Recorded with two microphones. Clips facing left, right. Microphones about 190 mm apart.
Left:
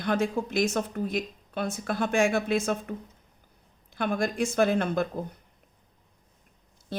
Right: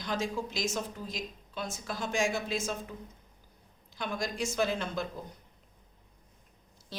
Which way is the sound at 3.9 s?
55° left (ahead or behind).